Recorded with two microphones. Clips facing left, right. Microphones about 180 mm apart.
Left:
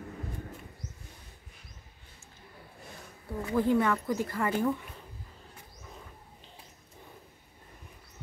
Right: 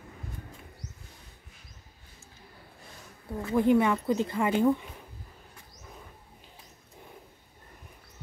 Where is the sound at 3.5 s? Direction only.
20° right (ahead or behind).